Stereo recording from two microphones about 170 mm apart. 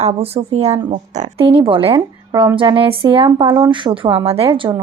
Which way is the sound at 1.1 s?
40° right (ahead or behind).